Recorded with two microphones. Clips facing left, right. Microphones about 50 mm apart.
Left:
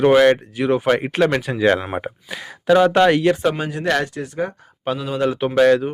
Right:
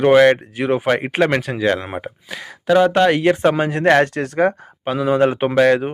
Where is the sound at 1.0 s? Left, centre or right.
Right.